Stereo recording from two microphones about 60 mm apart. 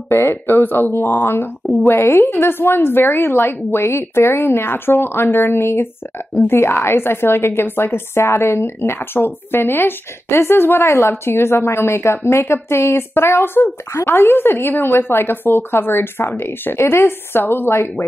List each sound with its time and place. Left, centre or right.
0.2 s a woman's voice: left